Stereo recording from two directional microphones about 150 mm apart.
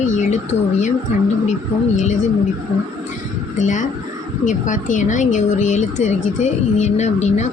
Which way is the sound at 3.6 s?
55° left (ahead or behind).